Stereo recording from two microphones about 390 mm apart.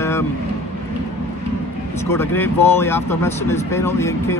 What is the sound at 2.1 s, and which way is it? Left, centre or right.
Speech, centre.